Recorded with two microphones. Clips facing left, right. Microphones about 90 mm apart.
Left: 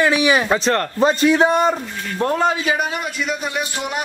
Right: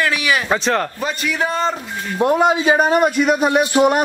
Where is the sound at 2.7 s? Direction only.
45° right (ahead or behind).